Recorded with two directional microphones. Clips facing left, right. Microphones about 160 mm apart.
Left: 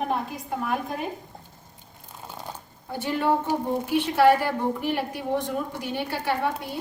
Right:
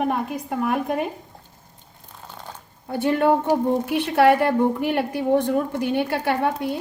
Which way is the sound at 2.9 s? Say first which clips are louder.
Right 5 dB; 60° right (ahead or behind).